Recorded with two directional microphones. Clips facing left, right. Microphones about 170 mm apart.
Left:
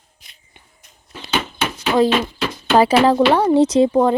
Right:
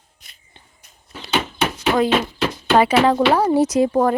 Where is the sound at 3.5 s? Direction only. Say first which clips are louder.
Left 3 dB; 25° left (ahead or behind).